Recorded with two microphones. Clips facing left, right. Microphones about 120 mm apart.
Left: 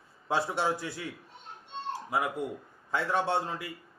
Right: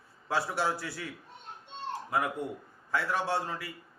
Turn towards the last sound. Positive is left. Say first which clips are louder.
# left 2 dB
turn(degrees=25)  # may be behind; listen again after turning